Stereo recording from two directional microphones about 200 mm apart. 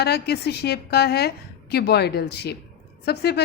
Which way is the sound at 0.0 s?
55° left (ahead or behind).